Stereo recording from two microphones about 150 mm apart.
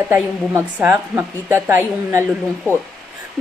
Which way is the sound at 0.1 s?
15° right (ahead or behind).